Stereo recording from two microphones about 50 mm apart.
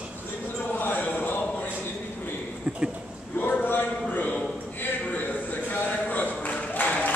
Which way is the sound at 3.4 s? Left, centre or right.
Left.